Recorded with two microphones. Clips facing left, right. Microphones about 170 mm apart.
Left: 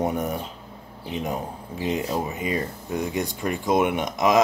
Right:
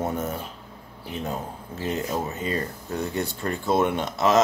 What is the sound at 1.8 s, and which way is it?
A man's voice, 15° left (ahead or behind).